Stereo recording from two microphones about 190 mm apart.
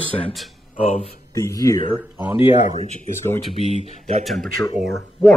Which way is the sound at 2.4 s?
35° left (ahead or behind).